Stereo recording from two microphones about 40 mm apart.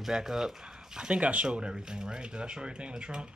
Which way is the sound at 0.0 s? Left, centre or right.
Centre.